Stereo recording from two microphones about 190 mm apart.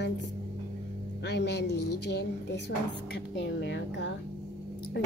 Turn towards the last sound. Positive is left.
turn(degrees=70)  # may be behind; listen again after turning